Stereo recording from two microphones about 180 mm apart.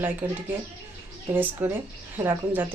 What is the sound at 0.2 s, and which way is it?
Speech, 10° right (ahead or behind).